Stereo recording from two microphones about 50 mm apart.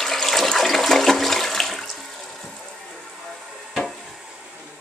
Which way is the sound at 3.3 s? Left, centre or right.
Centre.